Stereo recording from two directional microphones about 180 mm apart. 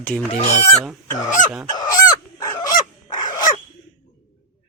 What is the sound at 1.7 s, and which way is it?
Fowl, 20° left (ahead or behind).